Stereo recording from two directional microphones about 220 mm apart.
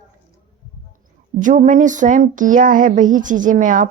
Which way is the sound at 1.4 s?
35° right (ahead or behind).